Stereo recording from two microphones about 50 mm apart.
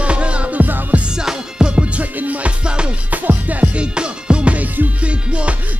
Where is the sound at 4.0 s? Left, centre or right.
Centre.